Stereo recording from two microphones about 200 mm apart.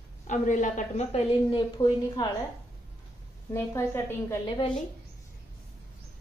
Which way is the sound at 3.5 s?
10° left (ahead or behind).